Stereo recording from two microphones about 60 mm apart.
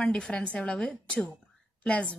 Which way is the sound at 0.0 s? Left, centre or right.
Centre.